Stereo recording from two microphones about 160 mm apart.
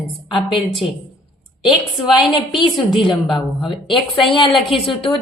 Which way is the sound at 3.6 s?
30° left (ahead or behind).